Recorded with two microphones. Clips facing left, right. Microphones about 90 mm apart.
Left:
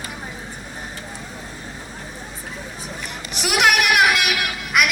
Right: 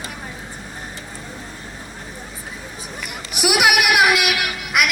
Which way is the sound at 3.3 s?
10° right (ahead or behind).